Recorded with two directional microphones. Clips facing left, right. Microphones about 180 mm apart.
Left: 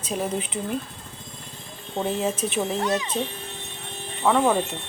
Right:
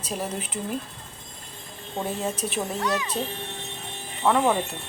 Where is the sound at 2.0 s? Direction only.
5° right (ahead or behind).